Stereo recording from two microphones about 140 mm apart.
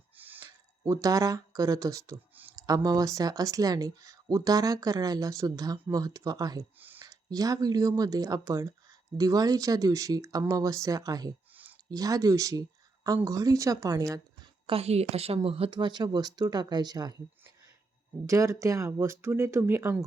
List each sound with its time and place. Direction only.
0.2 s a sound: 15° right (ahead or behind)
1.0 s speech: 25° right (ahead or behind)
6.7 s speech: 15° right (ahead or behind)
7.0 s speech: 25° right (ahead or behind)
14.7 s a woman's voice: 45° right (ahead or behind); by 17.2 s 30° right (ahead or behind)
18.3 s speech: 20° right (ahead or behind)